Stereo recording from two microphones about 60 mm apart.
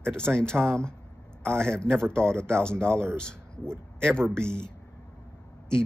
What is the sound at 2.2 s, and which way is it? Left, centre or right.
Speech, right.